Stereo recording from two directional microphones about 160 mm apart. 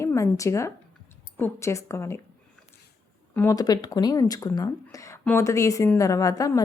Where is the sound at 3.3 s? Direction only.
10° left (ahead or behind).